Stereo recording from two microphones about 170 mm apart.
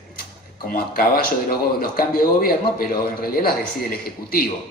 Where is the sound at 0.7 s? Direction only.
60° left (ahead or behind).